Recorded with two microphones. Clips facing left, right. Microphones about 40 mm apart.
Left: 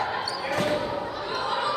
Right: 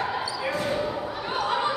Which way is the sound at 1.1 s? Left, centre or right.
Centre.